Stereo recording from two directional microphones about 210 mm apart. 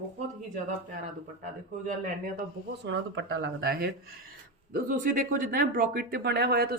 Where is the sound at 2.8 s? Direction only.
60° right (ahead or behind).